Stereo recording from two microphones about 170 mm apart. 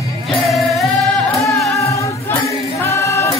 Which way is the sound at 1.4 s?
20° left (ahead or behind).